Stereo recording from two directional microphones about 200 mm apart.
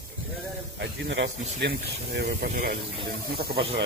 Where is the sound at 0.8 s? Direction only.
65° right (ahead or behind).